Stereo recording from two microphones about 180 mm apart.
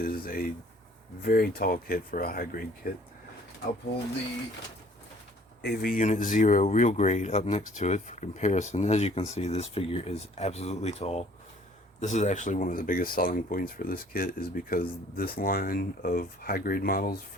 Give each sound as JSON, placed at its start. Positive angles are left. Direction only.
{"t": 0.0, "sound": "speech", "side_deg": 55}
{"t": 5.6, "sound": "speech", "side_deg": 60}